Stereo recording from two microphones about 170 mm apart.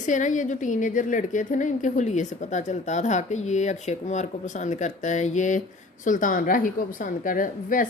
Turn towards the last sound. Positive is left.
turn(degrees=55)  # may be behind; listen again after turning